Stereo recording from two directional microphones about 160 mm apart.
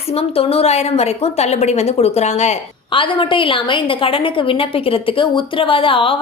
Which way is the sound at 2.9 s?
30° left (ahead or behind).